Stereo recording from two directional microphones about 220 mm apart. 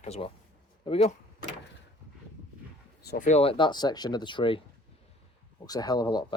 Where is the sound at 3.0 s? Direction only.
40° left (ahead or behind); by 4.6 s 20° left (ahead or behind).